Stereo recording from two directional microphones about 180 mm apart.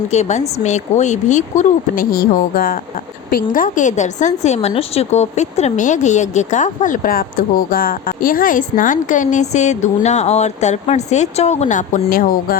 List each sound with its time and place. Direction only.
0.1 s a woman's voice: 40° left (ahead or behind)